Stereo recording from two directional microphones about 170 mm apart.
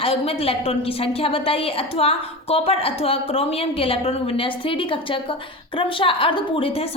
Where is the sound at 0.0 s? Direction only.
35° left (ahead or behind).